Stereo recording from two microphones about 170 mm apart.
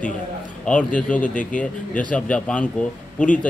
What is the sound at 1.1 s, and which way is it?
A man's voice, 5° left (ahead or behind).